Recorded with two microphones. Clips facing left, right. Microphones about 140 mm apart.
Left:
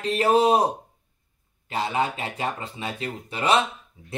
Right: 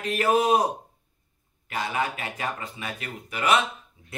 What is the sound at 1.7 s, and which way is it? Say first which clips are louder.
A man's voice: left 3 dB; 30° left (ahead or behind).